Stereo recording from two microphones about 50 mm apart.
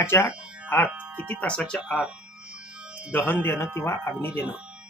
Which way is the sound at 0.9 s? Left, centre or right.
Right.